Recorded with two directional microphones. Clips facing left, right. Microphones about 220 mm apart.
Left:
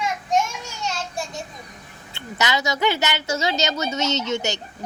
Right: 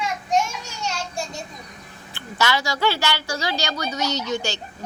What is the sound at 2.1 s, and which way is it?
A woman's voice, 20° left (ahead or behind).